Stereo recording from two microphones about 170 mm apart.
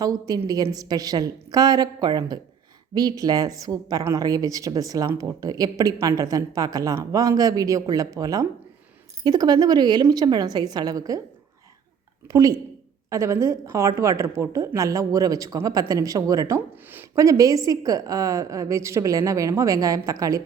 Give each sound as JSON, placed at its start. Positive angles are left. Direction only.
{"t": 0.0, "sound": "a woman's voice", "side_deg": -20}
{"t": 12.3, "sound": "a woman's voice", "side_deg": -20}